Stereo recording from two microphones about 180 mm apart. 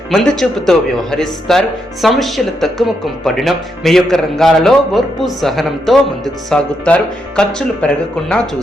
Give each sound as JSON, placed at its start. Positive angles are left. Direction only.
{"t": 0.1, "sound": "a man's voice", "side_deg": 0}